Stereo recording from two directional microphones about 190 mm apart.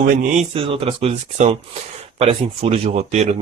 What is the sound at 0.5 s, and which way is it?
Speech, 30° right (ahead or behind).